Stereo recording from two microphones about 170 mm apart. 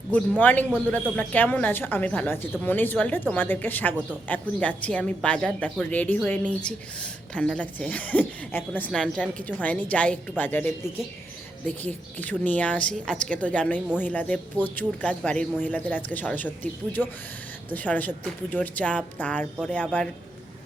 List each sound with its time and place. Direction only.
0.1 s a woman's voice: 10° left (ahead or behind)
11.8 s a woman's voice: 10° left (ahead or behind)
17.0 s speech: 5° right (ahead or behind)
17.7 s a woman's voice: 10° left (ahead or behind)